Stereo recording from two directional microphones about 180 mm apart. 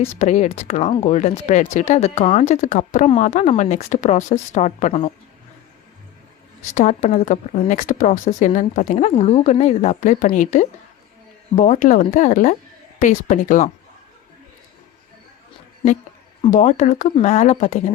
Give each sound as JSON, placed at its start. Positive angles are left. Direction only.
{"t": 0.2, "sound": "speech", "side_deg": 40}
{"t": 6.7, "sound": "speech", "side_deg": 40}
{"t": 16.4, "sound": "speech", "side_deg": 45}